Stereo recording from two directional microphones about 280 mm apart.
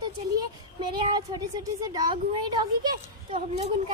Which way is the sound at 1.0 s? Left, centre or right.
Centre.